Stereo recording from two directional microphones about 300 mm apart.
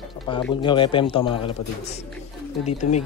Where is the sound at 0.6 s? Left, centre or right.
Centre.